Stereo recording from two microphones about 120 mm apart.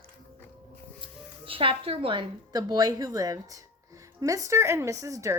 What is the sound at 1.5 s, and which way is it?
A woman's voice, 50° right (ahead or behind).